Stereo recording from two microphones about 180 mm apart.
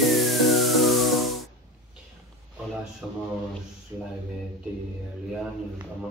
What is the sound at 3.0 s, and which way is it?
Speech, 5° right (ahead or behind).